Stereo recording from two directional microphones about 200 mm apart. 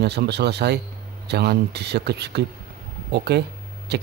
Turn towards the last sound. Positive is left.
turn(degrees=-55)  # may be behind; listen again after turning